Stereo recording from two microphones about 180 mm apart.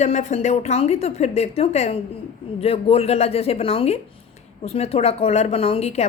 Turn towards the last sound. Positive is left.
turn(degrees=35)  # may be behind; listen again after turning